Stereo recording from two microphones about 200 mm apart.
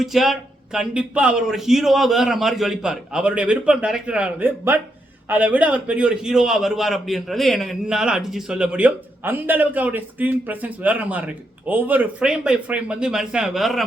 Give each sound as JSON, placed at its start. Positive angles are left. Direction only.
{"t": 0.0, "sound": "a man's voice", "side_deg": 0}